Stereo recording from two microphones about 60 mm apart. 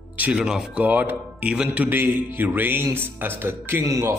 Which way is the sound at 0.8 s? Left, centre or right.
Right.